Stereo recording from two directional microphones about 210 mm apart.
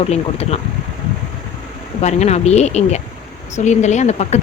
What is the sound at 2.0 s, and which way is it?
Speech, 30° left (ahead or behind).